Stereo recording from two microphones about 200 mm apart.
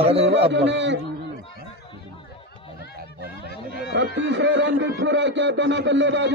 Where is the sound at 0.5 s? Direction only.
60° right (ahead or behind).